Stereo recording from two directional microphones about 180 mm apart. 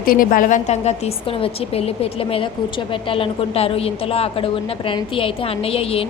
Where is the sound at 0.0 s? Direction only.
50° left (ahead or behind).